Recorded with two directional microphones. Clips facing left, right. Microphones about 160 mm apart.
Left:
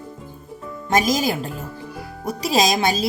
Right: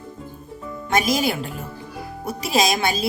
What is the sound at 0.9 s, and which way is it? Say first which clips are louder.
A woman's voice: left 1 dB; 40° left (ahead or behind).